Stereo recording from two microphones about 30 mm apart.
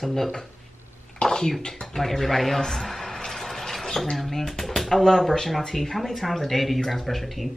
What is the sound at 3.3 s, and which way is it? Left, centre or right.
Speech, centre.